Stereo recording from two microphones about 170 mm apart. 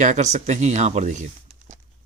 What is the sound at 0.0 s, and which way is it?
Speech, 45° right (ahead or behind).